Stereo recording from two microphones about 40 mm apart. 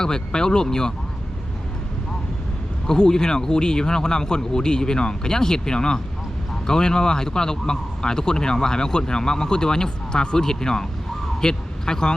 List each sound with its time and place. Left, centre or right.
0.0 s speech: centre
2.8 s speech: centre
11.3 s vehicle: centre